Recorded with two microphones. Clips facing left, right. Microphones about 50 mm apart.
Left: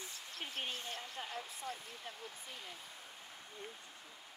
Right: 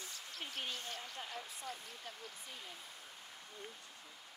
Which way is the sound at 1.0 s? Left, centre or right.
Centre.